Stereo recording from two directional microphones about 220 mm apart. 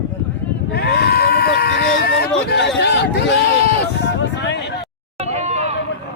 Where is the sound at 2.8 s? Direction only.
50° left (ahead or behind).